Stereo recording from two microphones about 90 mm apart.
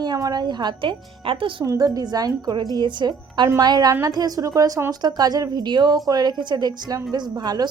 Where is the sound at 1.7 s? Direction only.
40° right (ahead or behind).